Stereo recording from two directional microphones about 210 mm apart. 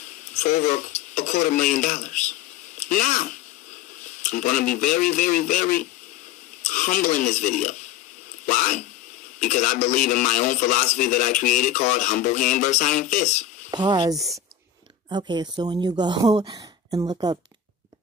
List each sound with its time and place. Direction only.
0.6 s a man's voice: 40° left (ahead or behind)
8.5 s a sound: 35° left (ahead or behind)
9.4 s a man's voice: 35° left (ahead or behind)
13.7 s speech: 20° right (ahead or behind)